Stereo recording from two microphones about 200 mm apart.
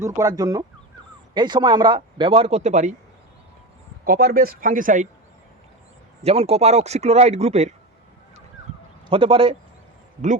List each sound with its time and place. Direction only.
0.0 s speech: 15° right (ahead or behind); by 2.9 s 35° right (ahead or behind)
4.0 s speech: 50° right (ahead or behind)
6.2 s speech: 30° right (ahead or behind)
9.0 s speech: 25° right (ahead or behind)